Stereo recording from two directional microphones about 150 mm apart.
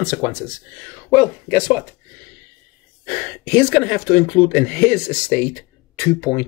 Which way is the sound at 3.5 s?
10° left (ahead or behind).